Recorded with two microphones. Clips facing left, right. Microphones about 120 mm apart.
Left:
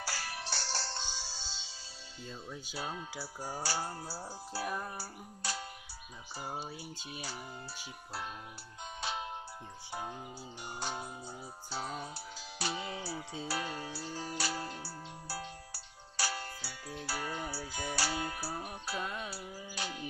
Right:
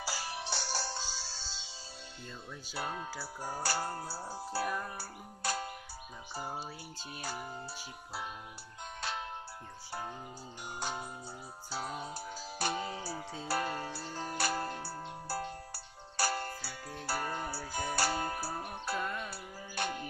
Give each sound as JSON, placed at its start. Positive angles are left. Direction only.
{"t": 0.0, "sound": "music", "side_deg": -20}
{"t": 2.7, "sound": "music", "side_deg": -60}
{"t": 7.1, "sound": "music", "side_deg": -50}
{"t": 9.0, "sound": "music", "side_deg": 5}
{"t": 10.8, "sound": "music", "side_deg": 0}
{"t": 12.1, "sound": "music", "side_deg": -50}
{"t": 19.0, "sound": "music", "side_deg": 10}
{"t": 19.3, "sound": "music", "side_deg": -55}